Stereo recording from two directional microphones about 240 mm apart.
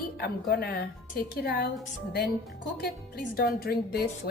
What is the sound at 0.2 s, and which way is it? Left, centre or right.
A woman's voice, left.